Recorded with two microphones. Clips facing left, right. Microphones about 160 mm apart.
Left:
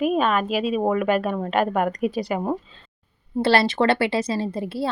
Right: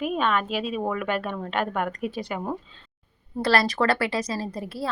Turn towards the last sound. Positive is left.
turn(degrees=25)  # may be behind; listen again after turning